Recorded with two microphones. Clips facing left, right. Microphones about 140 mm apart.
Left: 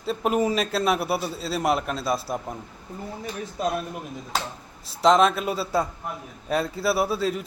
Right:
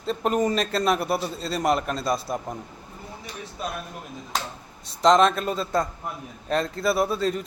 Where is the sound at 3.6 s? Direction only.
40° left (ahead or behind).